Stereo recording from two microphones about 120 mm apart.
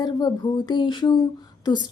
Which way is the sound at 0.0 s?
35° left (ahead or behind).